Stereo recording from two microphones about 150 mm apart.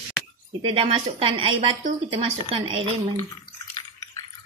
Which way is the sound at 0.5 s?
35° right (ahead or behind).